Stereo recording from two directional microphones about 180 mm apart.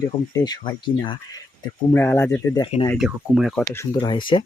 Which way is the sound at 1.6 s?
15° left (ahead or behind).